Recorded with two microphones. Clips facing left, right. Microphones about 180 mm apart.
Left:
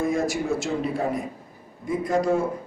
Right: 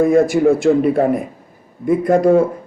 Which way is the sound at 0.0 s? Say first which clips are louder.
Right 12 dB; 55° right (ahead or behind).